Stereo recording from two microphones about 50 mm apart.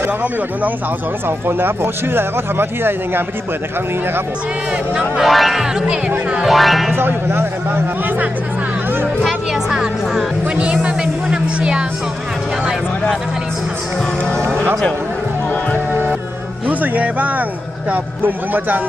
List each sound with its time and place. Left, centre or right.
1.6 s a man's voice: right
5.2 s speech: centre
5.6 s speech: centre
6.4 s speech: centre
7.0 s a man's voice: right
9.2 s a woman's voice: centre
11.2 s music: centre
14.5 s speech: right
16.6 s speech: right